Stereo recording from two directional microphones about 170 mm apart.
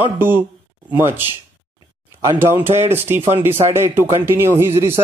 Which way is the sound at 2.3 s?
10° right (ahead or behind).